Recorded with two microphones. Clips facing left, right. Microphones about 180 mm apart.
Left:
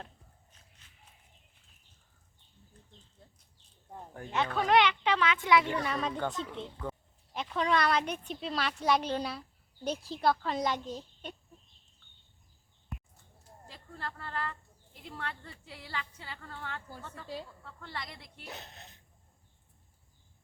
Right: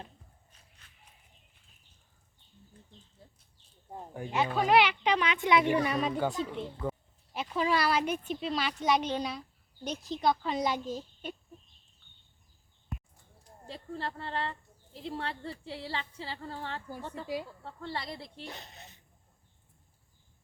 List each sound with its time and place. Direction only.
3.2 s a sound: 5° right (ahead or behind)
3.9 s speech: 10° right (ahead or behind)
9.9 s speech: 30° left (ahead or behind)
10.2 s speech: centre (ahead or behind)
13.7 s speech: 30° right (ahead or behind)
18.4 s speech: centre (ahead or behind)